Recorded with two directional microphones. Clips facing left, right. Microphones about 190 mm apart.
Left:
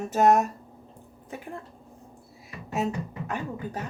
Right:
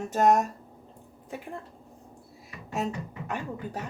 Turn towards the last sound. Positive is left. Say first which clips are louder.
# left 1 dB
turn(degrees=0)  # may be behind; listen again after turning